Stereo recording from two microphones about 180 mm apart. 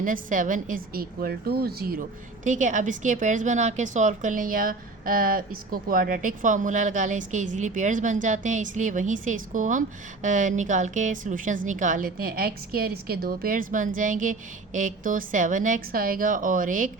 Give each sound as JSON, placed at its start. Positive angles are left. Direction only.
{"t": 0.0, "sound": "a woman's voice", "side_deg": -45}
{"t": 2.4, "sound": "a woman's voice", "side_deg": -45}